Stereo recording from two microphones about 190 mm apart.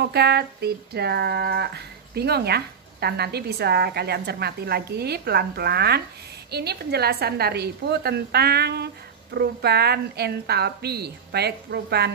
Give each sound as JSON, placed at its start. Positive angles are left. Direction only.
{"t": 0.0, "sound": "speech", "side_deg": -60}